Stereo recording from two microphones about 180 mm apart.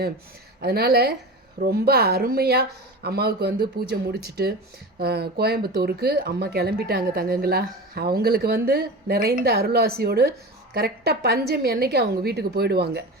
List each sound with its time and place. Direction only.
0.6 s speech: 60° right (ahead or behind)